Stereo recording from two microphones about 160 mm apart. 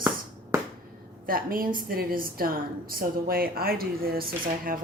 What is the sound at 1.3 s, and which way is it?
A woman's voice, 60° right (ahead or behind).